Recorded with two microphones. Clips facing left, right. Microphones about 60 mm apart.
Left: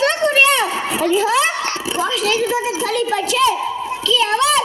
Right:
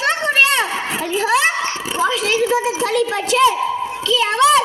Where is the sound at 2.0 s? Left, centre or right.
Right.